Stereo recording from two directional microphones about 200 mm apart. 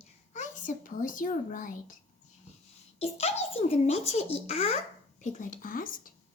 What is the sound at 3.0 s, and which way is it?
A child's voice, 30° left (ahead or behind).